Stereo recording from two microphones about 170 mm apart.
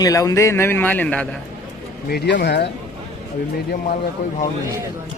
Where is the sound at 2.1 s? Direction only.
80° left.